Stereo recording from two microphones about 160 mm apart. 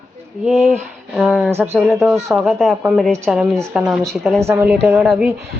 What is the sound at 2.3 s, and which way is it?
Speech, centre (ahead or behind).